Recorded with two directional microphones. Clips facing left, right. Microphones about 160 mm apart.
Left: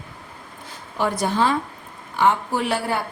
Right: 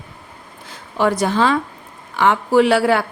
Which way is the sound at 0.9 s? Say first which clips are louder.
Right 4 dB; 90° right.